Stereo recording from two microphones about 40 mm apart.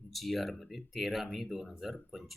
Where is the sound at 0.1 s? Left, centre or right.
Centre.